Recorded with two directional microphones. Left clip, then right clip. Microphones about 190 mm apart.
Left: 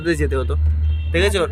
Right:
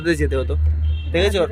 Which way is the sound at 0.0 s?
Centre (ahead or behind).